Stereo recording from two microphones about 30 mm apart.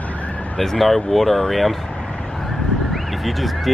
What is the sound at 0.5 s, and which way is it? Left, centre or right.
Speech, centre.